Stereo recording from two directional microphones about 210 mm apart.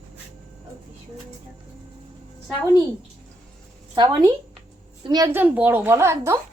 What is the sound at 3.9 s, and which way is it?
A woman's voice, 20° right (ahead or behind).